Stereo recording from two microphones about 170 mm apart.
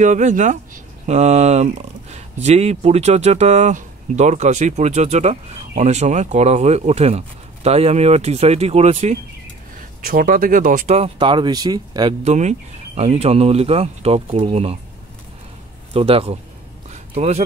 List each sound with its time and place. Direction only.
0.0 s speech: 45° right (ahead or behind)
9.8 s speech: 55° right (ahead or behind)
11.1 s speech: 30° right (ahead or behind)
12.3 s speech: 40° right (ahead or behind)
15.9 s speech: 35° right (ahead or behind)
16.9 s a sound: 40° right (ahead or behind)